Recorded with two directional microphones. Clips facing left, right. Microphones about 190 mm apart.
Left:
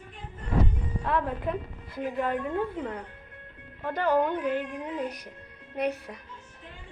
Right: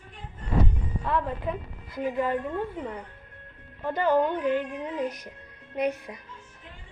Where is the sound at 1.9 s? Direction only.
5° right (ahead or behind).